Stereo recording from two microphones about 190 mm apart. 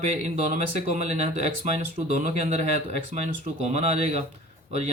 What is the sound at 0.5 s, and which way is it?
Speech, 35° right (ahead or behind).